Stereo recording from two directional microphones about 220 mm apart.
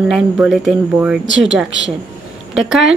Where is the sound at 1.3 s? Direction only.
60° right (ahead or behind).